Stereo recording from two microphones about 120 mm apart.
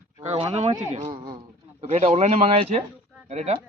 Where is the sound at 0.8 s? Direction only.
80° right; by 3.6 s 65° right (ahead or behind).